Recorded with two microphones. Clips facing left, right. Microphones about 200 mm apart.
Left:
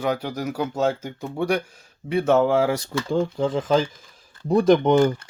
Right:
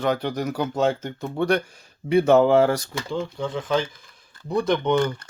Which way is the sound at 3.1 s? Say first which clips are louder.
Left 5 dB; 40° left (ahead or behind).